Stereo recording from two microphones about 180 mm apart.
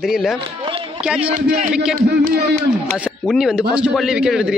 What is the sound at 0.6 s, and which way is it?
Run, 30° right (ahead or behind).